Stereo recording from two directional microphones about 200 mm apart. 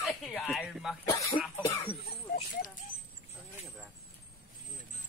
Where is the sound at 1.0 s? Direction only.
20° left (ahead or behind).